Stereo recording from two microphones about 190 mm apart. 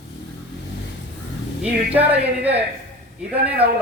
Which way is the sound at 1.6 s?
10° right (ahead or behind).